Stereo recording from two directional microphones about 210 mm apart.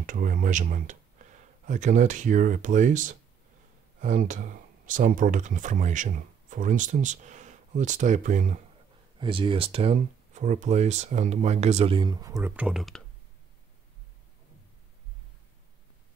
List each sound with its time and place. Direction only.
0.0 s speech: 40° right (ahead or behind)
9.2 s speech: 25° right (ahead or behind); by 13.0 s centre (ahead or behind)